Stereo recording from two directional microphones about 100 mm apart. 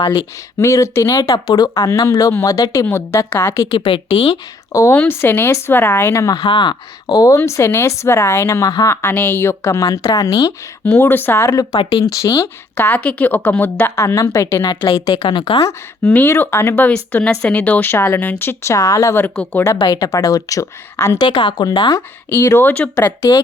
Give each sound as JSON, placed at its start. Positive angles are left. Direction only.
{"t": 0.6, "sound": "speech", "side_deg": 30}
{"t": 3.7, "sound": "a woman's voice", "side_deg": 65}
{"t": 4.7, "sound": "speech", "side_deg": 30}
{"t": 4.9, "sound": "speech", "side_deg": 20}
{"t": 6.4, "sound": "speech", "side_deg": 55}
{"t": 10.8, "sound": "speech", "side_deg": 20}
{"t": 11.4, "sound": "speech", "side_deg": 30}
{"t": 14.7, "sound": "a woman's voice", "side_deg": 50}
{"t": 16.0, "sound": "speech", "side_deg": 20}
{"t": 19.1, "sound": "speech", "side_deg": 15}
{"t": 19.7, "sound": "speech", "side_deg": 40}
{"t": 21.2, "sound": "a woman's voice", "side_deg": 50}
{"t": 22.3, "sound": "speech", "side_deg": 25}
{"t": 23.0, "sound": "speech", "side_deg": 30}